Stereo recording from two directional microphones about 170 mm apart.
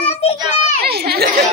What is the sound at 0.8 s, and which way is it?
Speech, 65° right (ahead or behind).